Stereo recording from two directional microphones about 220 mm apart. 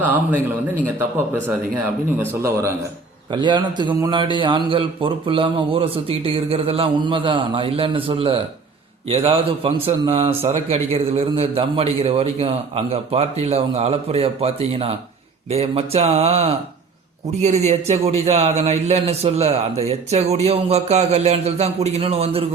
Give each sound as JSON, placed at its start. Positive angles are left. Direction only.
{"t": 0.0, "sound": "speech", "side_deg": -5}
{"t": 2.1, "sound": "a man's voice", "side_deg": -10}